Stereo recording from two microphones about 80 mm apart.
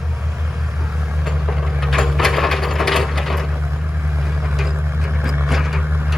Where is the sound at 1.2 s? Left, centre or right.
Centre.